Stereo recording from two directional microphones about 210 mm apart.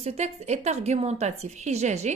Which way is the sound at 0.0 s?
30° right (ahead or behind).